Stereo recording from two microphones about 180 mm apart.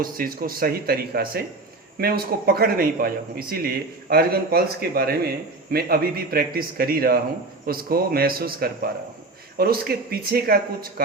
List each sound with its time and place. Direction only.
0.0 s speech: 55° right (ahead or behind)